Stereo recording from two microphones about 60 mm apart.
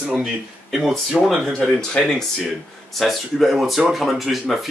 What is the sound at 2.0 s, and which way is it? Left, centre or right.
Speech, centre.